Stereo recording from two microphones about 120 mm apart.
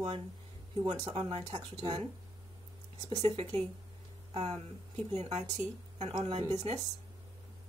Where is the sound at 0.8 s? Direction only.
55° right (ahead or behind).